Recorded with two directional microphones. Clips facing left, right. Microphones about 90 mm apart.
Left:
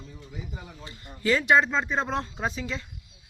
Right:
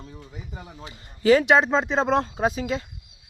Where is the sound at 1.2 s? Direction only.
65° right (ahead or behind).